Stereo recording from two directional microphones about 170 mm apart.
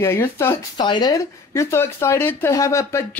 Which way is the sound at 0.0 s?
15° left (ahead or behind).